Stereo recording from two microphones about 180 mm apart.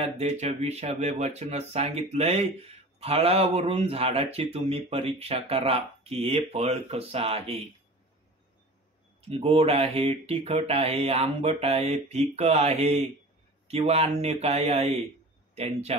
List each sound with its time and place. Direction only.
0.0 s speech: 35° right (ahead or behind)
9.3 s speech: 35° right (ahead or behind)